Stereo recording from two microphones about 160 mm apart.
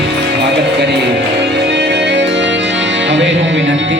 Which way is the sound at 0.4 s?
90° right.